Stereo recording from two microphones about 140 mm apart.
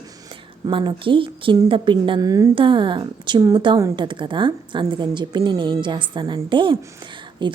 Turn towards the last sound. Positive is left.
turn(degrees=-35)  # may be behind; listen again after turning